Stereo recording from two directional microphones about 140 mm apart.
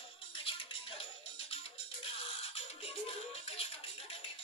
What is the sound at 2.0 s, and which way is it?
Music, 45° left (ahead or behind).